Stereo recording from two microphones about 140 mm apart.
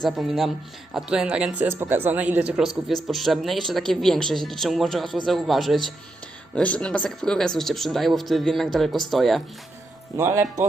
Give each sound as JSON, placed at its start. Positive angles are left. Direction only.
{"t": 0.0, "sound": "a woman's voice", "side_deg": 0}
{"t": 10.2, "sound": "speech", "side_deg": -20}